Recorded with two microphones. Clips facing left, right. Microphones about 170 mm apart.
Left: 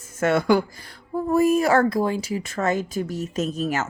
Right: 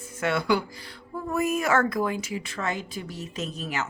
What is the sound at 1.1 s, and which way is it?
A woman's voice, 35° left (ahead or behind).